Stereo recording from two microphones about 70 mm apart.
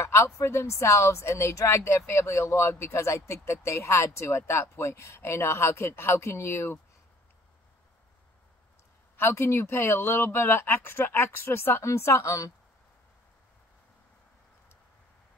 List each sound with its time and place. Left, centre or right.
0.0 s speech: left
9.1 s speech: left